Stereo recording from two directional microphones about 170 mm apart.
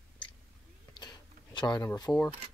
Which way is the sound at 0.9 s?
25° left (ahead or behind).